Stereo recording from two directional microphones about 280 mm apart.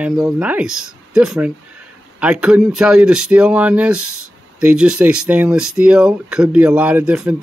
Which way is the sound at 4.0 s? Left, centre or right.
Right.